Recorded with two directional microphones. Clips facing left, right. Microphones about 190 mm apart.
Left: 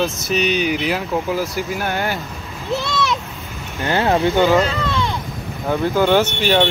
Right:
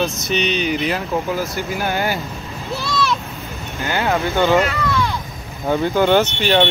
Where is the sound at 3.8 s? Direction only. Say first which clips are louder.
Left 3 dB; 30° left (ahead or behind).